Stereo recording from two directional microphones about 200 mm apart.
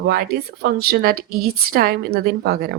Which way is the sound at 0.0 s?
50° right (ahead or behind).